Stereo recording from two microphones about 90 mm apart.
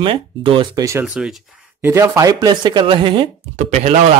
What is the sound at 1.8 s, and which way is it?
Speech, 35° right (ahead or behind).